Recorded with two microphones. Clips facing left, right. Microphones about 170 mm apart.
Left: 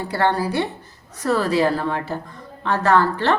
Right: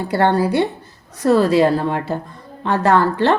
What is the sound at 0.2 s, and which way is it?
Speech, 15° right (ahead or behind).